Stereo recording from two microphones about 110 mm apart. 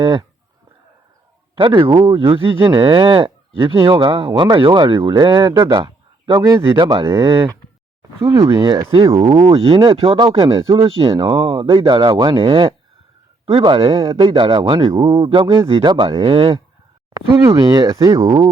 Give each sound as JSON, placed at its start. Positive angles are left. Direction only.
{"t": 0.0, "sound": "speech", "side_deg": -45}
{"t": 1.5, "sound": "speech", "side_deg": -50}
{"t": 5.8, "sound": "a sound", "side_deg": -45}
{"t": 6.7, "sound": "speech", "side_deg": -45}
{"t": 8.3, "sound": "speech", "side_deg": -30}
{"t": 10.3, "sound": "speech", "side_deg": -40}
{"t": 10.8, "sound": "speech", "side_deg": -55}
{"t": 14.1, "sound": "speech", "side_deg": -40}
{"t": 15.0, "sound": "speech", "side_deg": -35}
{"t": 15.3, "sound": "speech", "side_deg": -50}
{"t": 17.3, "sound": "speech", "side_deg": -30}
{"t": 18.3, "sound": "speech", "side_deg": -50}